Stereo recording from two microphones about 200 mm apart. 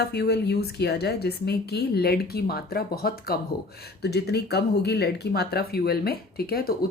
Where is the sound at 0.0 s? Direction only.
55° left (ahead or behind).